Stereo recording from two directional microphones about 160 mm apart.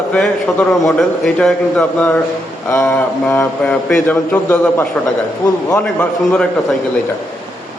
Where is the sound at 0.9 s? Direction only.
5° left (ahead or behind).